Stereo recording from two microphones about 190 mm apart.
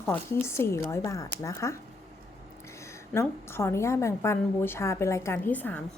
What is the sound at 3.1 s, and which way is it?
A woman's voice, 15° left (ahead or behind).